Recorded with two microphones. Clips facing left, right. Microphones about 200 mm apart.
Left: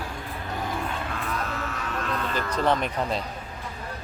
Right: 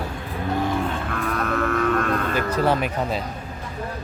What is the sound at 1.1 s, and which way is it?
Cattle, 55° right (ahead or behind).